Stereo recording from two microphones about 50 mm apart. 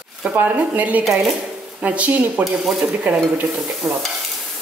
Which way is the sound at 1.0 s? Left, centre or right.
Centre.